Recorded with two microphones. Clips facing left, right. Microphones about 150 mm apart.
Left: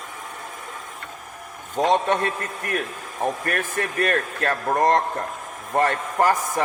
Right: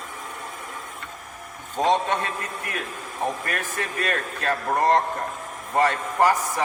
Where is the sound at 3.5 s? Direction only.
55° left (ahead or behind).